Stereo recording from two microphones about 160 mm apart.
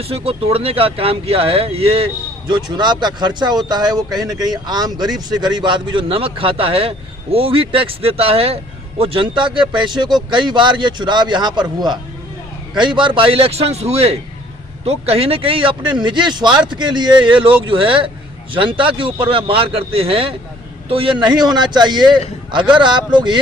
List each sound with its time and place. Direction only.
0.0 s speech: 35° right (ahead or behind)
12.7 s speech: 30° right (ahead or behind)